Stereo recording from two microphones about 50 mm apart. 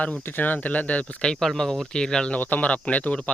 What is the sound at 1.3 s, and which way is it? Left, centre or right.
Speech, centre.